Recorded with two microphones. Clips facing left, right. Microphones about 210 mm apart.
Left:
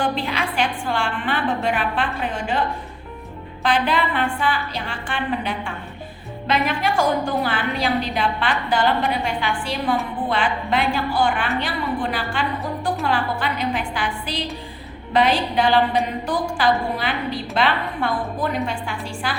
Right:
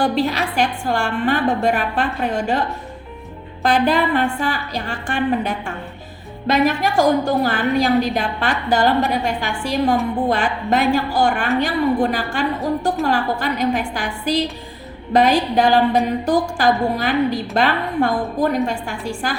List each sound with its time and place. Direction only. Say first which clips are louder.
0.0 s a woman's voice: right 5 dB; 40° right (ahead or behind)